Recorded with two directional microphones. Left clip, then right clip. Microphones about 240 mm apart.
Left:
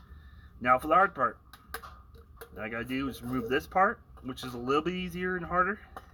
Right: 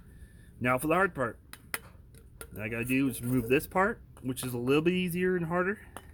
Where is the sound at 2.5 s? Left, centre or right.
Right.